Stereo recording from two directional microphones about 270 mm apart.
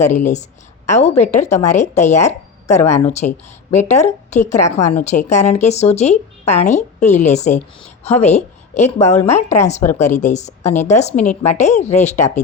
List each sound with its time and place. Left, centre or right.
0.9 s a woman's voice: left